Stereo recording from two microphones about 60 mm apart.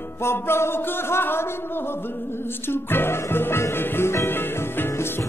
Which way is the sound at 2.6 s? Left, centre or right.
Left.